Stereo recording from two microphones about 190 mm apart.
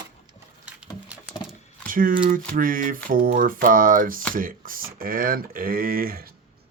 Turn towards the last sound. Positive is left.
turn(degrees=-50)  # may be behind; listen again after turning